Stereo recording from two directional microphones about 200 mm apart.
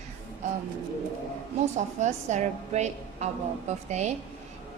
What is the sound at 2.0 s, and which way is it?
A woman's voice, 35° right (ahead or behind).